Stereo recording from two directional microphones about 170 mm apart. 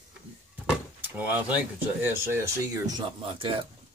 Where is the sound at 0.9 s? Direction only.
10° right (ahead or behind).